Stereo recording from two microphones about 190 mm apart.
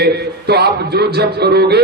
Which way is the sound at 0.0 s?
60° right (ahead or behind).